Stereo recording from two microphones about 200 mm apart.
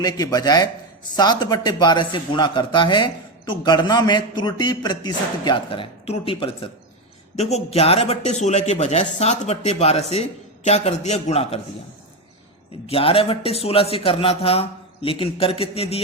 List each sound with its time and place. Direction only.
0.0 s speech: 20° left (ahead or behind)
12.9 s speech: 30° left (ahead or behind)